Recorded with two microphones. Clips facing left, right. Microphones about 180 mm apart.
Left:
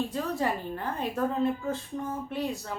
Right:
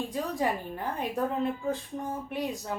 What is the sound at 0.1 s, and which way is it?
Speech, 15° right (ahead or behind).